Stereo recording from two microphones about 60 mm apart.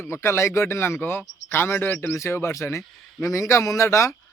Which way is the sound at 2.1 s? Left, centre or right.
Left.